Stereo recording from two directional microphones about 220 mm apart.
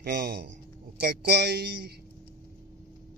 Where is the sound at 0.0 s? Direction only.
45° right (ahead or behind).